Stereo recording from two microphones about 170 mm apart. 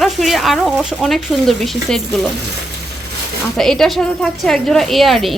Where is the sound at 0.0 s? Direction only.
Centre (ahead or behind).